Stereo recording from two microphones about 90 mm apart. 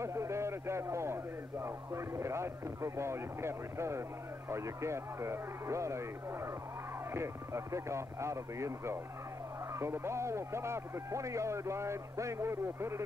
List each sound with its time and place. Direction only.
0.0 s a man's voice: 30° right (ahead or behind)